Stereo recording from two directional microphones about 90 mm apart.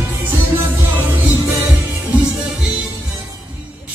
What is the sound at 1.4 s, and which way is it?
Music, 35° right (ahead or behind).